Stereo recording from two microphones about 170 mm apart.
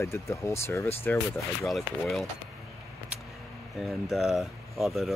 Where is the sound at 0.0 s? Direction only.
15° left (ahead or behind).